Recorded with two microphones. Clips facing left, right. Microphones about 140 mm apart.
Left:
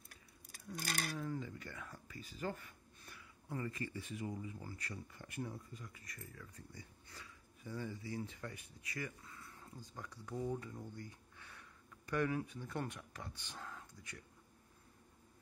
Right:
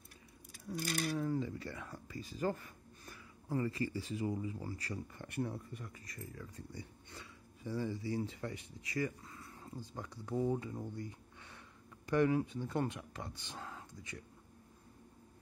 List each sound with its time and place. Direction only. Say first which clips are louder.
0.7 s speech: right 5 dB; 35° right (ahead or behind)
5.1 s speech: right 6 dB; 60° right (ahead or behind)
5.9 s speech: right 6 dB; 30° right (ahead or behind)